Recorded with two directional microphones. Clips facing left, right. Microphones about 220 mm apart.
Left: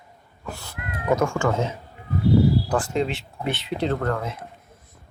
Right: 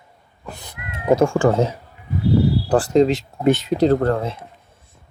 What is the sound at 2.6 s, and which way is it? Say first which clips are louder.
Speech: right 9 dB; 35° right (ahead or behind).